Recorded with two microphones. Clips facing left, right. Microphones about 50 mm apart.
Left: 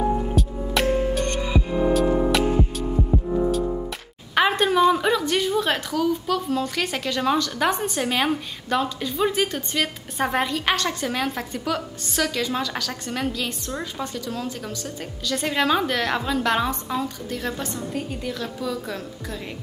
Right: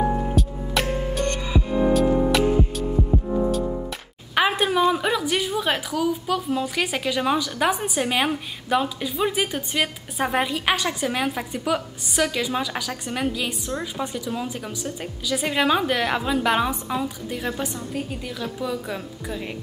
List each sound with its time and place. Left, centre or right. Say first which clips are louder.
0.3 s music: even; centre
1.5 s music: right 1 dB; left
1.9 s music: right 1 dB; centre
4.4 s a woman's voice: left 2 dB; centre